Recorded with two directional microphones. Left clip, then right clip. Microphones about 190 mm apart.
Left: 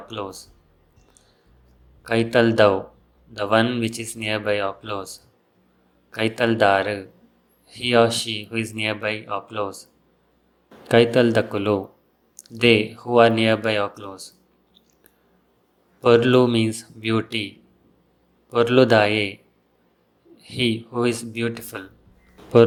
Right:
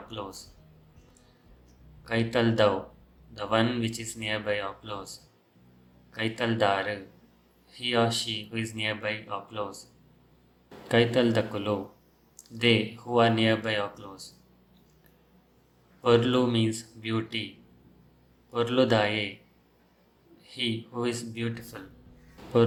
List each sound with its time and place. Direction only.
0.1 s speech: 30° left (ahead or behind)
2.0 s speech: 35° left (ahead or behind)
10.8 s speech: 30° left (ahead or behind)
16.0 s speech: 35° left (ahead or behind)
18.5 s speech: 35° left (ahead or behind)
20.4 s speech: 35° left (ahead or behind)